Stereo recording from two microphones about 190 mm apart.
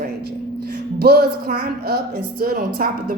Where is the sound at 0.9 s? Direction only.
55° right (ahead or behind).